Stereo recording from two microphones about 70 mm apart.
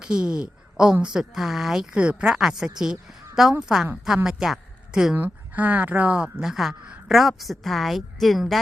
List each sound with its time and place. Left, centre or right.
0.0 s a woman's voice: centre
5.1 s speech: right
6.4 s a woman's voice: centre